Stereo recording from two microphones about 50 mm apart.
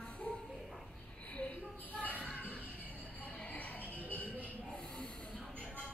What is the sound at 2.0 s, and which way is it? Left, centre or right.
Basketball bounce, left.